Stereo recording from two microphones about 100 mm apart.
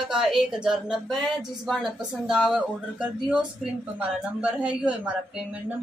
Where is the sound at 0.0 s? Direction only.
5° right (ahead or behind).